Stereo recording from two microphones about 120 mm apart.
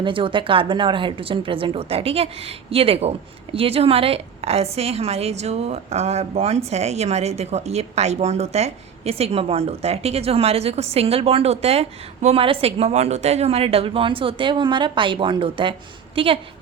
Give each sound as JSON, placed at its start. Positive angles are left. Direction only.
{"t": 0.0, "sound": "a woman's voice", "side_deg": -45}